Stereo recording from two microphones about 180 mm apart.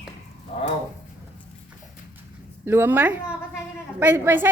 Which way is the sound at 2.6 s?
10° right (ahead or behind).